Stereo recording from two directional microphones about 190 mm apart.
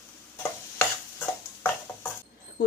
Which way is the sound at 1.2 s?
10° left (ahead or behind).